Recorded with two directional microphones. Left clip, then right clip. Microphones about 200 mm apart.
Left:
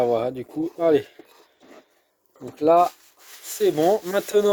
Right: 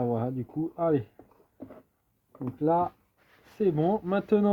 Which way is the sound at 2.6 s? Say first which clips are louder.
Left 9 dB; 60° left (ahead or behind).